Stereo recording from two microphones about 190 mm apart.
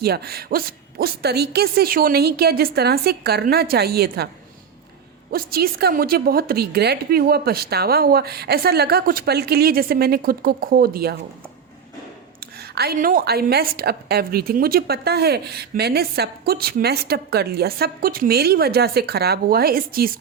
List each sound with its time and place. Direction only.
0.0 s a woman's voice: 55° right (ahead or behind)
5.3 s a woman's voice: 55° right (ahead or behind)
12.4 s a woman's voice: 55° right (ahead or behind)